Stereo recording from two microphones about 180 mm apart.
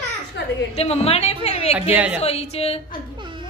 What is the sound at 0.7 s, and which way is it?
A woman's voice, 35° left (ahead or behind).